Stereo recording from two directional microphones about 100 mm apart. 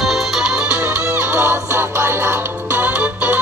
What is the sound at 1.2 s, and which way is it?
Music, 20° right (ahead or behind).